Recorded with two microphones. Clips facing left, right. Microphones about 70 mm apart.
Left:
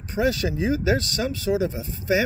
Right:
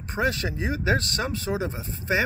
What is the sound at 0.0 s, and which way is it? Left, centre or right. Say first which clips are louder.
Speech: left 3 dB; right.